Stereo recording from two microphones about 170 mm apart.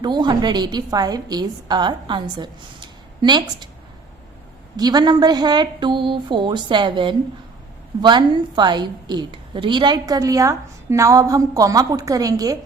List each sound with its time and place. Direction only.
0.0 s a woman's voice: 25° right (ahead or behind)
4.8 s a woman's voice: 25° right (ahead or behind)